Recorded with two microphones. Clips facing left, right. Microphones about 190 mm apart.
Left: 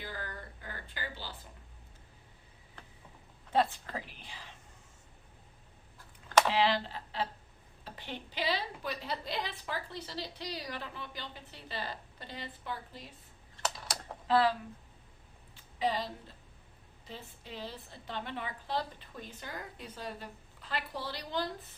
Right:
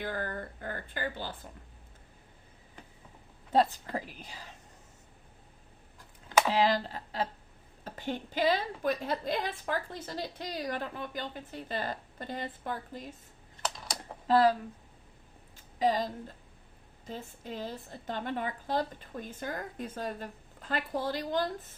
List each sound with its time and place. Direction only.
0.0 s a sound: 50° right (ahead or behind)
3.5 s a woman's voice: 40° right (ahead or behind)
6.5 s a woman's voice: 40° right (ahead or behind)
13.6 s computer keyboard: centre (ahead or behind)
14.3 s a woman's voice: 40° right (ahead or behind)
15.8 s a woman's voice: 45° right (ahead or behind)